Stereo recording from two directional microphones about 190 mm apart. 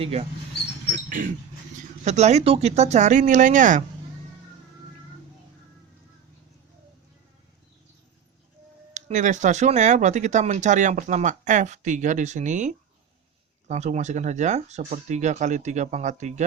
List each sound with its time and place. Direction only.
0.0 s speech: 35° right (ahead or behind)
0.9 s a sound: 45° right (ahead or behind)
2.0 s speech: 35° right (ahead or behind)
8.9 s speech: 40° right (ahead or behind)